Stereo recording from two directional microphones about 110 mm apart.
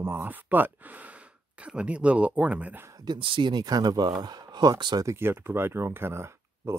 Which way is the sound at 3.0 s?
45° right (ahead or behind).